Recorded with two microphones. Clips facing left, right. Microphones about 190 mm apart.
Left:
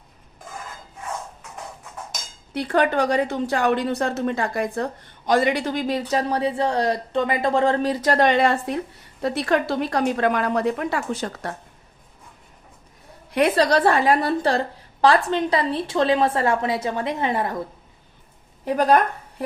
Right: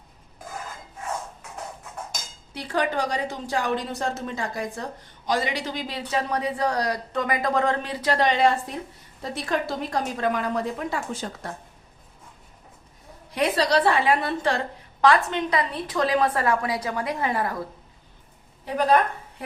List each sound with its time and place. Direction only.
2.5 s a woman's voice: 60° left (ahead or behind)
13.3 s a woman's voice: 55° left (ahead or behind); by 17.6 s 25° left (ahead or behind)